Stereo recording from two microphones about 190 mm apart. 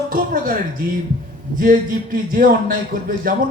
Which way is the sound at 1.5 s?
45° right (ahead or behind).